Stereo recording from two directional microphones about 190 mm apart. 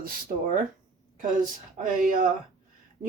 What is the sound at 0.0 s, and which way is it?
Speech, 50° right (ahead or behind).